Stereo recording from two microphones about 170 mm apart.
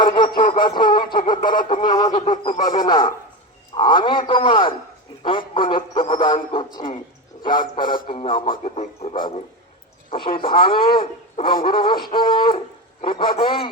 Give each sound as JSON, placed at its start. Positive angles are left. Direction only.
{"t": 0.0, "sound": "a sound", "side_deg": 25}
{"t": 0.6, "sound": "a man's voice", "side_deg": 25}
{"t": 7.4, "sound": "speech", "side_deg": 55}
{"t": 8.1, "sound": "speech", "side_deg": 30}
{"t": 10.3, "sound": "speech", "side_deg": 30}
{"t": 11.5, "sound": "a sound", "side_deg": 55}
{"t": 12.3, "sound": "speech", "side_deg": 30}